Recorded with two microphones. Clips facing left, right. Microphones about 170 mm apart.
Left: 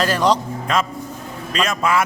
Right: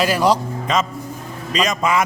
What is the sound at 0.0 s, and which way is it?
Speech, 10° right (ahead or behind).